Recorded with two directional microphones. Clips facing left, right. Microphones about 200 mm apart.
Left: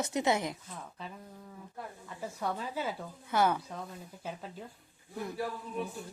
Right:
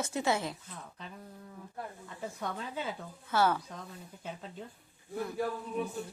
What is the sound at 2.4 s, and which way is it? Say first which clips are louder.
Speech: left 4 dB; 5° left (ahead or behind).